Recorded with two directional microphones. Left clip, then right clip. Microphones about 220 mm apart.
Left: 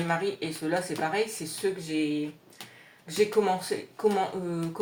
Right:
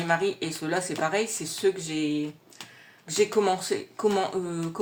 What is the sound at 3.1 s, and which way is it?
Speech, 45° right (ahead or behind).